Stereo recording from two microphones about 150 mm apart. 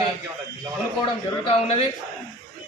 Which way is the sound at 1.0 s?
35° left (ahead or behind).